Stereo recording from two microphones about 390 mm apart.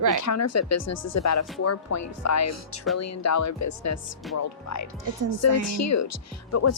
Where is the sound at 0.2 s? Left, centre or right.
Left.